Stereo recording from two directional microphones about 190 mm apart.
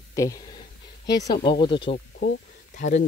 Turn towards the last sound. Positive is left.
turn(degrees=40)  # may be behind; listen again after turning